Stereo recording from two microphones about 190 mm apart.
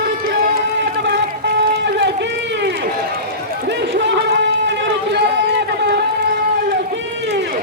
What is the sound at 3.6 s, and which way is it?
Run, 60° right (ahead or behind).